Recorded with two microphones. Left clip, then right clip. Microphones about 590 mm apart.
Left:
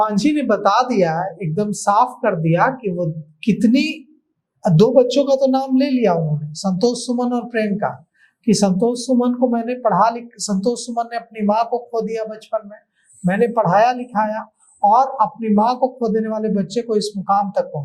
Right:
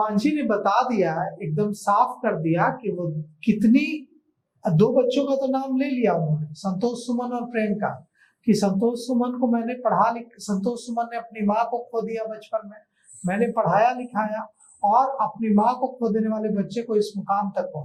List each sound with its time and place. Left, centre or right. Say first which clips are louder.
0.0 s speech: left 5 dB; left